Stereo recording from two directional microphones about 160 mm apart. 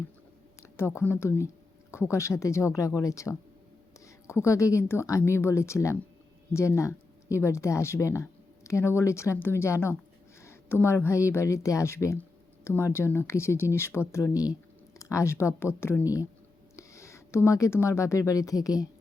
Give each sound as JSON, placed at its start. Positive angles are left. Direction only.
{"t": 0.8, "sound": "a woman's voice", "side_deg": 15}